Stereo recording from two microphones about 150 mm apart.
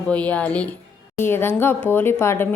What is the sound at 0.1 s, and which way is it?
Speech, 10° left (ahead or behind).